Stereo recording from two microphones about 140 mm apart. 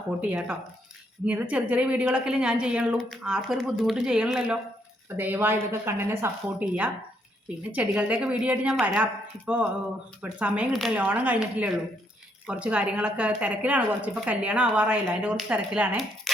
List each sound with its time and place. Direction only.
0.2 s a woman's voice: 10° right (ahead or behind)
10.2 s a woman's voice: 10° right (ahead or behind)
10.7 s a woman's voice: centre (ahead or behind)
10.9 s a woman's voice: 10° right (ahead or behind)
16.3 s a sound: centre (ahead or behind)